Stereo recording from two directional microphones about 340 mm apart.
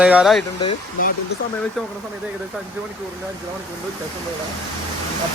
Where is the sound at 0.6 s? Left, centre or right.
Centre.